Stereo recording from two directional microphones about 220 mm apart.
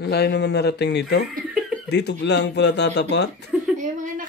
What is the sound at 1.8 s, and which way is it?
Speech, 50° left (ahead or behind).